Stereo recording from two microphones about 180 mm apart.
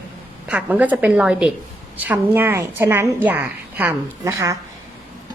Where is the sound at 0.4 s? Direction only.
5° right (ahead or behind).